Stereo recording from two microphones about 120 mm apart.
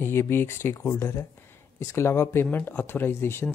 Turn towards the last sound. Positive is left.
turn(degrees=20)  # may be behind; listen again after turning